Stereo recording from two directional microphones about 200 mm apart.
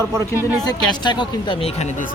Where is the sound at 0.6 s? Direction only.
20° left (ahead or behind).